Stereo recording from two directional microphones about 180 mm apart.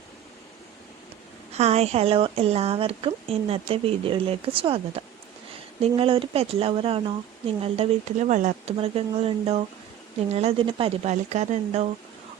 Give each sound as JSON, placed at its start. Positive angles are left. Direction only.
{"t": 1.5, "sound": "a woman's voice", "side_deg": -35}